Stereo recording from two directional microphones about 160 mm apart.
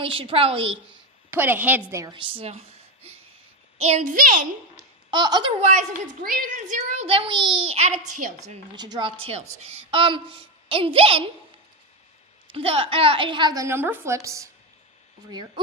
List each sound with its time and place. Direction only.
0.0 s a woman's voice: 35° right (ahead or behind)
1.3 s a woman's voice: 15° right (ahead or behind)
2.3 s a child's voice: 40° right (ahead or behind); by 4.4 s 55° right (ahead or behind)
5.1 s a woman's voice: 25° right (ahead or behind)
6.2 s a woman's voice: 50° right (ahead or behind)
8.7 s a woman's voice: 25° right (ahead or behind)
12.5 s a woman's voice: 35° right (ahead or behind)